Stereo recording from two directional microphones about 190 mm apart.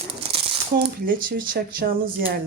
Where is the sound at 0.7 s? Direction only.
50° right (ahead or behind).